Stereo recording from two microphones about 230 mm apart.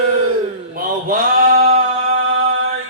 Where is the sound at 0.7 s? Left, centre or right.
Right.